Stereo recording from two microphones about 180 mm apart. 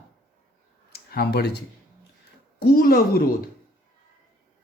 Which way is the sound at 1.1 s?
60° left (ahead or behind).